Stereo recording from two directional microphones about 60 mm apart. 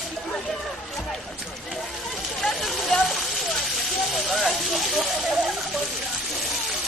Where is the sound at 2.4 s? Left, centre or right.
Centre.